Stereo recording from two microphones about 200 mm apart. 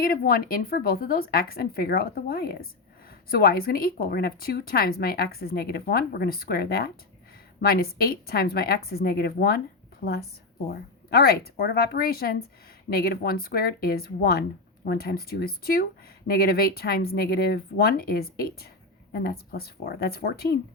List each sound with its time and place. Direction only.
0.0 s speech: 45° left (ahead or behind)